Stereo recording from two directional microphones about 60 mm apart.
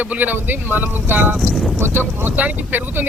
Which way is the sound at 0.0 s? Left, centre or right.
Right.